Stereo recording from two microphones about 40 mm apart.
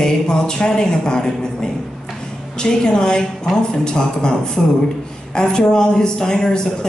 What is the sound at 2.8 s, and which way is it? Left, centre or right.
Speech, centre.